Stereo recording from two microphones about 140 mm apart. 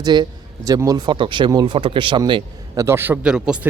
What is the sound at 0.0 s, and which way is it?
A man's voice, 30° right (ahead or behind).